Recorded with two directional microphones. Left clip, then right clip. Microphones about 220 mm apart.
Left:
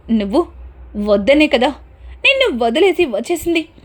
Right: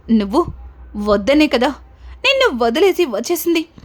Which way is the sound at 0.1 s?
15° right (ahead or behind).